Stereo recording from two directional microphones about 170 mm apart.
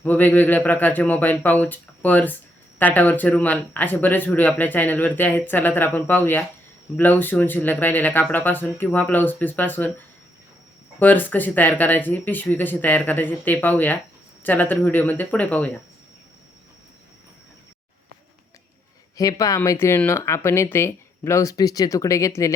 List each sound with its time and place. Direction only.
0.0 s speech: 10° left (ahead or behind)
11.0 s speech: 10° left (ahead or behind)
19.1 s speech: 20° left (ahead or behind)